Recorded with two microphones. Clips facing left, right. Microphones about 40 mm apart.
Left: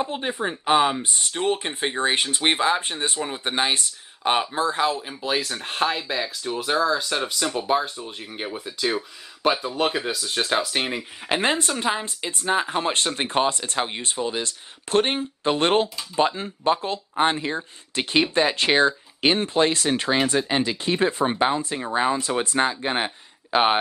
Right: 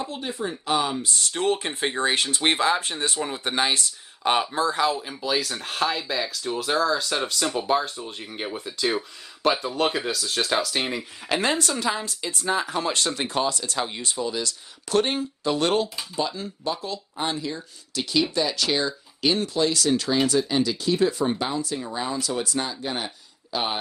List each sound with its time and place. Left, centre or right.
0.0 s speech: left
1.3 s speech: centre
2.0 s speech: left
11.2 s speech: left